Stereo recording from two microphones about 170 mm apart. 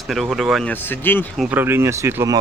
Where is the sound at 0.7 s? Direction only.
10° left (ahead or behind).